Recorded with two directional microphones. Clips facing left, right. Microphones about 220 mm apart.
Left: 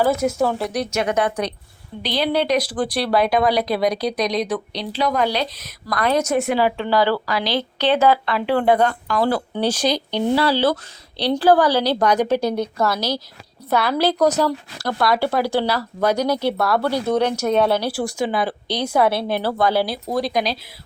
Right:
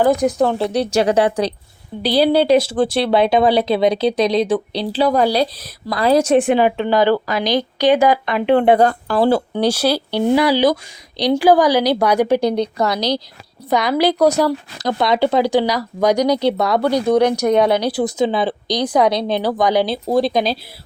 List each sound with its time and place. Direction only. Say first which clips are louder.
0.0 s speech: right 4 dB; 15° right (ahead or behind)
0.6 s a woman's voice: right 6 dB; 30° right (ahead or behind)
9.6 s speech: right 3 dB; 10° right (ahead or behind); by 20.5 s 25° right (ahead or behind)